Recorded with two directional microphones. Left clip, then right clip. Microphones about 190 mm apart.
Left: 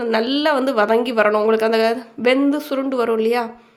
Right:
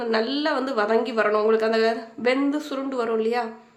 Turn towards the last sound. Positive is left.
turn(degrees=35)  # may be behind; listen again after turning